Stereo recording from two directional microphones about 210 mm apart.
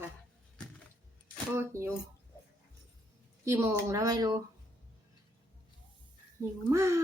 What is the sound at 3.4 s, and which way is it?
Speech, 15° right (ahead or behind).